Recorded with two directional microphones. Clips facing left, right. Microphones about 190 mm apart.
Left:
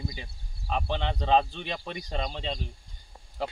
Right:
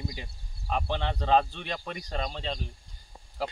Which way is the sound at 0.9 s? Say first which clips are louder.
Left 1 dB; 15° left (ahead or behind).